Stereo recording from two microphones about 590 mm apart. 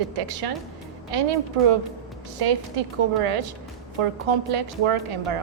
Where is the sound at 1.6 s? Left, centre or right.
Right.